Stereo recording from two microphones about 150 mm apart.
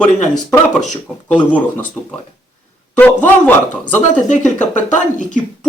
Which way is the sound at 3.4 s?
10° left (ahead or behind).